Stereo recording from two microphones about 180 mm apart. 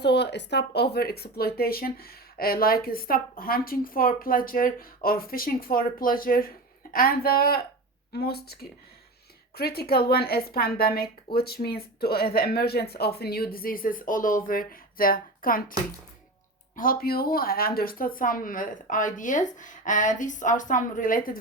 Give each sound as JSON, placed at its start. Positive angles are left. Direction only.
{"t": 0.0, "sound": "speech", "side_deg": 70}
{"t": 16.7, "sound": "speech", "side_deg": 50}